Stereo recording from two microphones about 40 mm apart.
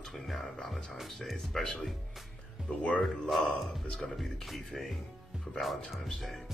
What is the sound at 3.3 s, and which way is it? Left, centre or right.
Speech, centre.